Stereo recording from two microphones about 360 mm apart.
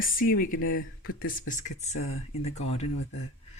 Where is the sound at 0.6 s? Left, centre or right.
Left.